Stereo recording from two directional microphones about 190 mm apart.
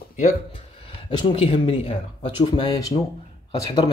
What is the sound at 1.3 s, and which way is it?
Speech, 30° left (ahead or behind).